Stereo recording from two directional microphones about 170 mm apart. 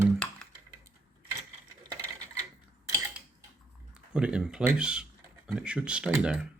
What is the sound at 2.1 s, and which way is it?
Coin, 20° right (ahead or behind).